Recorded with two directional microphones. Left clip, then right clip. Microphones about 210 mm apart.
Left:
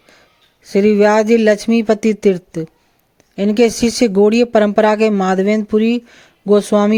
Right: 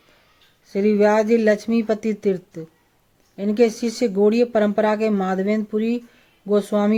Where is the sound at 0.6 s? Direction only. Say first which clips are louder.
Left 6 dB; 45° left (ahead or behind).